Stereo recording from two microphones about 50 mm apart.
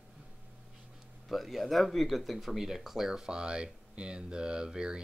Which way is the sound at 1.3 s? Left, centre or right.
Centre.